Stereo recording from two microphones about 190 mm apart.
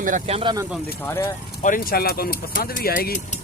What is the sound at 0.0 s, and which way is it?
Speech, 35° right (ahead or behind).